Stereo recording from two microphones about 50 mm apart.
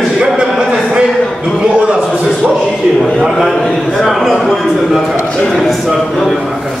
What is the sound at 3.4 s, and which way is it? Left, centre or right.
A man's voice, centre.